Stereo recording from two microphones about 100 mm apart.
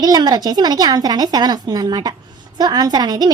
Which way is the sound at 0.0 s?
40° right (ahead or behind).